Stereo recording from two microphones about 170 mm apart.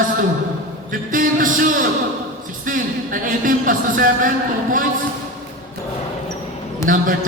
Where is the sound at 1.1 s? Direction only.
55° right (ahead or behind).